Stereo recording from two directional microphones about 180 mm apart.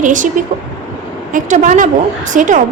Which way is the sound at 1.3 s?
45° right (ahead or behind).